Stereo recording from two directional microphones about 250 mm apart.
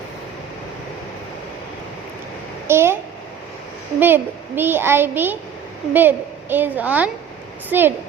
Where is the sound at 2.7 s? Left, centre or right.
Centre.